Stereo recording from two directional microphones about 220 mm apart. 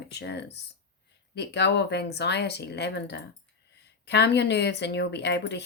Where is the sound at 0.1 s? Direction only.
50° left (ahead or behind).